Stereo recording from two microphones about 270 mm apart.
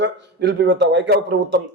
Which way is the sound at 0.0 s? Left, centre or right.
Right.